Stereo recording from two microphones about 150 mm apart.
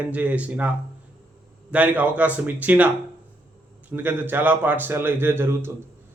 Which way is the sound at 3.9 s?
15° right (ahead or behind).